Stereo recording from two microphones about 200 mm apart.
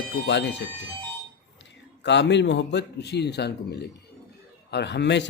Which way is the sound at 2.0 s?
60° left (ahead or behind).